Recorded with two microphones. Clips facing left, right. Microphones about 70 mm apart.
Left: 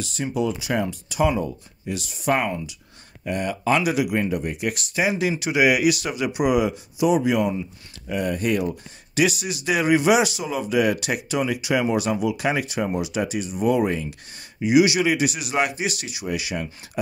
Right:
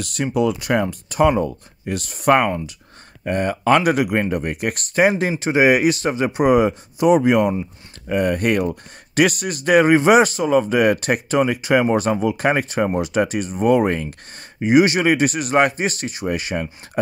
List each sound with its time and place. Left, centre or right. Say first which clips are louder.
0.0 s speech: right 5 dB; right